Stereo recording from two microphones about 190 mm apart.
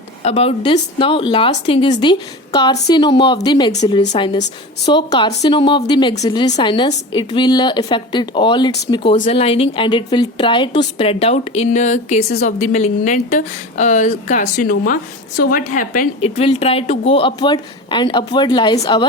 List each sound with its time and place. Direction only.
0.2 s a woman's voice: 35° left (ahead or behind)
4.0 s a woman's voice: 35° left (ahead or behind)
4.9 s a woman's voice: 25° left (ahead or behind)
9.1 s a woman's voice: 35° left (ahead or behind)